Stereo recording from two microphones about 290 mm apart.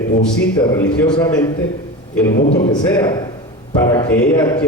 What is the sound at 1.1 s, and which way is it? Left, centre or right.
Speech, centre.